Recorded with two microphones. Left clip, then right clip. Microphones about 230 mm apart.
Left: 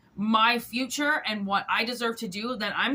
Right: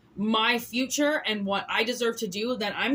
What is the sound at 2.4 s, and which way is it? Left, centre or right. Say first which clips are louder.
Speech: left 1 dB; centre.